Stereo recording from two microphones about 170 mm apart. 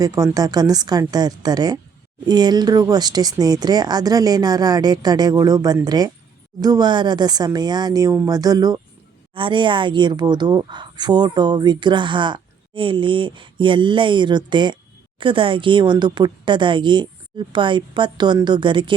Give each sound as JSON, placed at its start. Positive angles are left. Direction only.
{"t": 0.0, "sound": "a woman's voice", "side_deg": -20}